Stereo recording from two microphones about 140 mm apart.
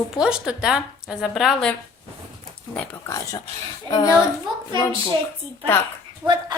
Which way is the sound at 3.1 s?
25° left (ahead or behind).